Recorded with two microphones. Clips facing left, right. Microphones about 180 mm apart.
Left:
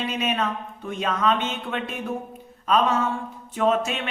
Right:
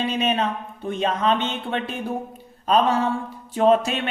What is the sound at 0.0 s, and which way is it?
Speech, 30° right (ahead or behind).